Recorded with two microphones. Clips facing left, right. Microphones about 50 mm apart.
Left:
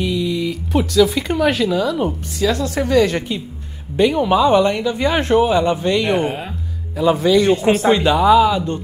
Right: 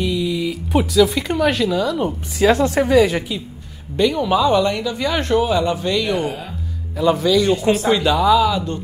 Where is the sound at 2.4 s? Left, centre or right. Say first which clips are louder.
Right 4 dB; right.